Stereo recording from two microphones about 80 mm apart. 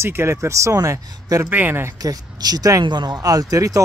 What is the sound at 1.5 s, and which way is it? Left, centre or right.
Speech, right.